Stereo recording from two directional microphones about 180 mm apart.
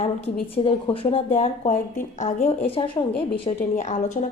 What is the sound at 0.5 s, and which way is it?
A woman's voice, 30° left (ahead or behind).